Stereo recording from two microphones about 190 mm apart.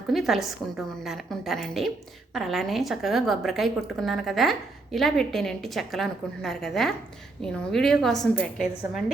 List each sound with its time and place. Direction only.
0.1 s a woman's voice: centre (ahead or behind)